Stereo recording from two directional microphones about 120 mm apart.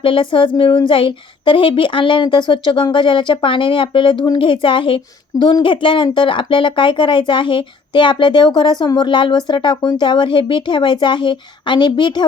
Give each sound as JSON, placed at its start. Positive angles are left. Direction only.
{"t": 0.0, "sound": "a woman's voice", "side_deg": 45}